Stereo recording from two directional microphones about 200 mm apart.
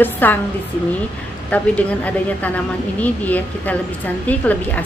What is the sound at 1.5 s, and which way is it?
A woman's voice, 5° left (ahead or behind).